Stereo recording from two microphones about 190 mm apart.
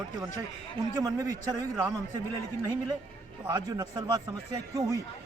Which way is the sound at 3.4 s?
15° right (ahead or behind).